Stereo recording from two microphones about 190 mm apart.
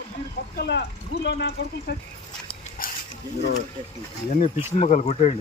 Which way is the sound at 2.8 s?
50° left (ahead or behind).